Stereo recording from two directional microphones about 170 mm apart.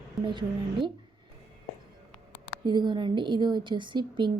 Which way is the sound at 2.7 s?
25° right (ahead or behind).